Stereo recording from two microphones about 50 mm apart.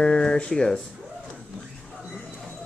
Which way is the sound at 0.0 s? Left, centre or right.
Centre.